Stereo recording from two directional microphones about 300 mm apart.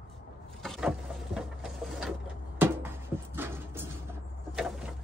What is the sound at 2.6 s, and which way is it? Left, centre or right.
Music, centre.